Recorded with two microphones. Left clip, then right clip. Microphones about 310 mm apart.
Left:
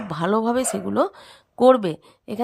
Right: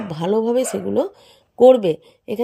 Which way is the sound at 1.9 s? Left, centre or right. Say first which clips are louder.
Right 8 dB; centre.